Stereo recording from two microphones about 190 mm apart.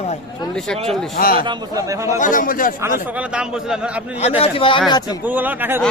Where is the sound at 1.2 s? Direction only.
50° left (ahead or behind).